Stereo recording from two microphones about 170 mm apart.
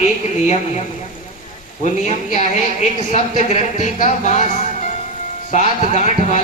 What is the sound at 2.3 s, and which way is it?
A man's voice, 45° left (ahead or behind).